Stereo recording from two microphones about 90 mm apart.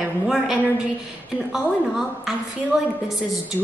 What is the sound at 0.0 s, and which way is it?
A woman's voice, 5° right (ahead or behind).